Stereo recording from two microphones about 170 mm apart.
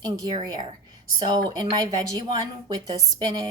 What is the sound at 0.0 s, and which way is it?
A woman's voice, 25° right (ahead or behind).